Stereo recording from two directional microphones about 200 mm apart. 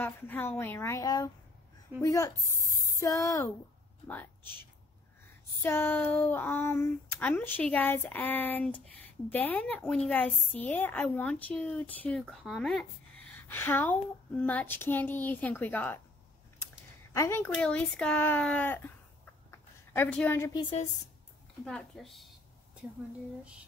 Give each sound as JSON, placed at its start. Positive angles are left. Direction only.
{"t": 0.0, "sound": "speech", "side_deg": 10}
{"t": 5.6, "sound": "speech", "side_deg": 10}
{"t": 17.1, "sound": "speech", "side_deg": 15}
{"t": 19.9, "sound": "speech", "side_deg": 5}
{"t": 21.6, "sound": "a woman's voice", "side_deg": 0}